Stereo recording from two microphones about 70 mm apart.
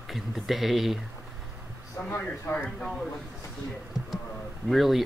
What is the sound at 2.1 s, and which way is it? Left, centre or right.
Speech, left.